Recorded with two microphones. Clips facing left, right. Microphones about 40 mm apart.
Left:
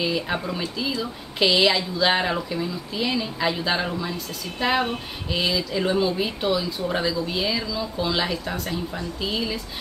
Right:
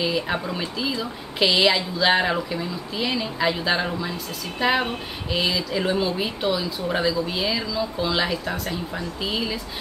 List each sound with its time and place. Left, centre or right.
0.0 s speech: centre